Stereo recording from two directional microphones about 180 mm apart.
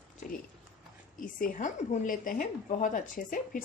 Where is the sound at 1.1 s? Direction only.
50° left (ahead or behind).